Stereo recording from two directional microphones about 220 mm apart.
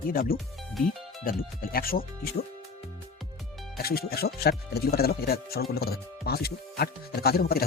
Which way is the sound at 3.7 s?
45° left (ahead or behind).